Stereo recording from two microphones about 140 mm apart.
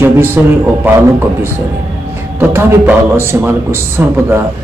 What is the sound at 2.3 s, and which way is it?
A man's voice, 15° right (ahead or behind).